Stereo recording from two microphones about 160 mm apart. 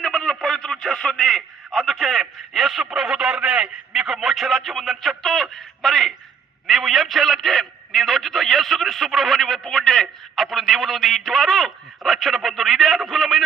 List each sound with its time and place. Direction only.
0.0 s a man's voice: 5° left (ahead or behind)